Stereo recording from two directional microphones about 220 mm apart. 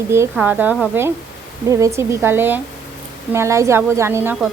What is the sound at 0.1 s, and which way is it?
A woman's voice, 10° right (ahead or behind).